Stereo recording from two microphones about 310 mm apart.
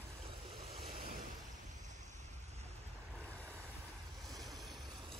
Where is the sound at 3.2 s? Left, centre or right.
Centre.